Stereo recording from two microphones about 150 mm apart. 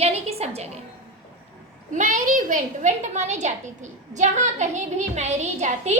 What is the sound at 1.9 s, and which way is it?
A woman's voice, 55° right (ahead or behind).